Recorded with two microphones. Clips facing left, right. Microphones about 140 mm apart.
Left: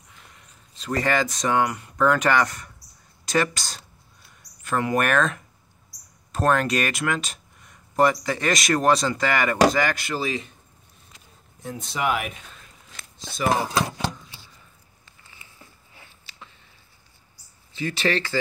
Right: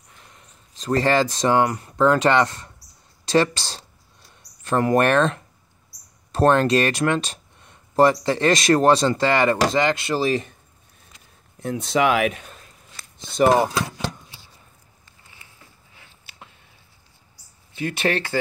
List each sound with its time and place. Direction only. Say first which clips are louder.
0.7 s speech: right 4 dB; 35° right (ahead or behind)
3.3 s a sound: right 5 dB; 30° right (ahead or behind)
6.3 s speech: right 5 dB; 30° right (ahead or behind)
11.6 s speech: right 6 dB; 90° right
13.2 s speech: right 7 dB; 55° right (ahead or behind)
16.3 s a sound: right 2 dB; 55° right (ahead or behind)
17.7 s speech: right 1 dB; 60° right (ahead or behind)